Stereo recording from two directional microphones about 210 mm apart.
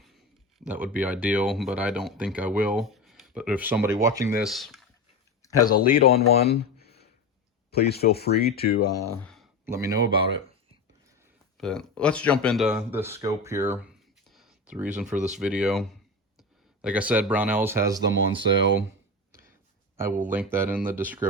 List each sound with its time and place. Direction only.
0.6 s speech: 5° right (ahead or behind)
4.4 s speech: centre (ahead or behind)
5.4 s a sound: 15° left (ahead or behind)
5.9 s speech: 45° left (ahead or behind)
7.7 s speech: 50° left (ahead or behind)
8.8 s speech: 15° left (ahead or behind)
9.6 s speech: 15° right (ahead or behind)
11.5 s speech: 5° left (ahead or behind); by 18.4 s 15° right (ahead or behind)
20.1 s speech: 40° right (ahead or behind)
20.3 s speech: 10° right (ahead or behind)